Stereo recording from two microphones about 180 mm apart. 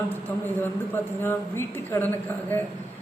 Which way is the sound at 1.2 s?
10° left (ahead or behind).